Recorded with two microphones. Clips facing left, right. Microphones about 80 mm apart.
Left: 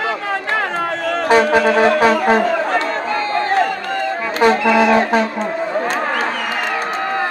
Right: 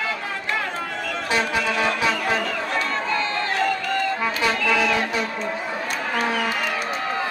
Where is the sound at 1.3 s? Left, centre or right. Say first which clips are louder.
Left 11 dB; left.